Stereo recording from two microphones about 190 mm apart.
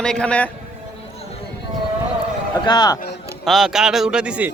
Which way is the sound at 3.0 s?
60° left (ahead or behind).